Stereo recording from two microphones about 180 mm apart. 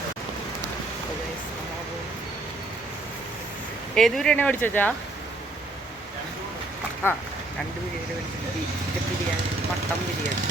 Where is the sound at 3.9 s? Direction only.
Centre (ahead or behind).